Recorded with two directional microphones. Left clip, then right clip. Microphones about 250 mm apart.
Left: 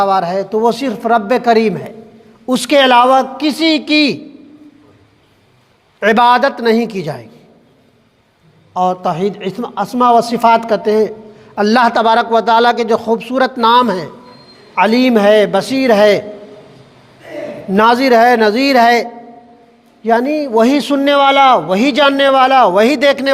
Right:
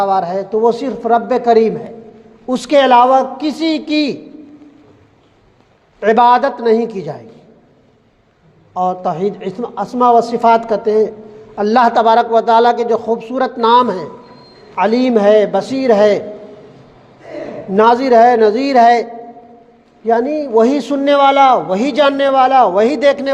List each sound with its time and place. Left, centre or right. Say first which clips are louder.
0.0 s a man's voice: left 2 dB; left
6.0 s a man's voice: even; left
8.7 s a man's voice: left 2 dB; left
17.7 s a man's voice: even; left
20.1 s a man's voice: left 1 dB; left